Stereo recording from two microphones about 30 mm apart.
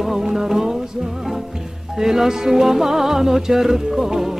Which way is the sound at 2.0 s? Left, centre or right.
Centre.